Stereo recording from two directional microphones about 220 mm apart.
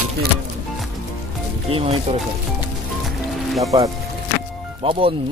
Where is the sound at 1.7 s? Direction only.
25° right (ahead or behind).